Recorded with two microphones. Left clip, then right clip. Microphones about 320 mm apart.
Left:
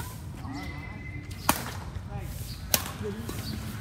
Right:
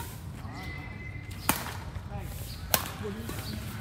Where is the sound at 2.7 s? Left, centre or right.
Centre.